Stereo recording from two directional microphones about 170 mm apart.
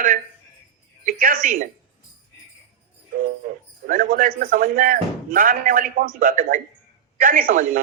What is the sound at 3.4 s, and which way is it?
Speech, 50° right (ahead or behind).